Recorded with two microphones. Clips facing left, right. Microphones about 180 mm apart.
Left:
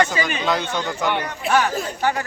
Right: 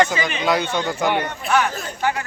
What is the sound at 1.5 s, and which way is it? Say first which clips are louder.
Speech: left 1 dB; 40° left (ahead or behind).